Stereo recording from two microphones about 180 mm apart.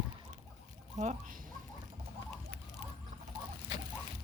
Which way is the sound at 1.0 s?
45° right (ahead or behind).